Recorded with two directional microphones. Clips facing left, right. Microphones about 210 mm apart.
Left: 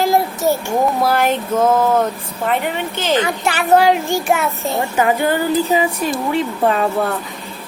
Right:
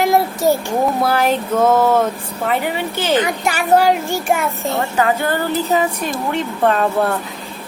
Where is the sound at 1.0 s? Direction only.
Centre (ahead or behind).